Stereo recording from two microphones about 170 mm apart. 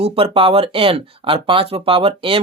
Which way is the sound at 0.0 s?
35° right (ahead or behind).